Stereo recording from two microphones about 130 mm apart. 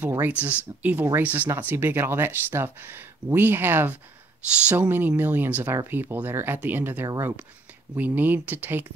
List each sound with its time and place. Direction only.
0.3 s speech: 10° right (ahead or behind)